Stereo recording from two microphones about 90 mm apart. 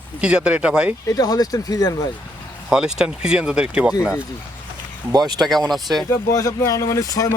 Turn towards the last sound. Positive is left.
turn(degrees=35)  # may be behind; listen again after turning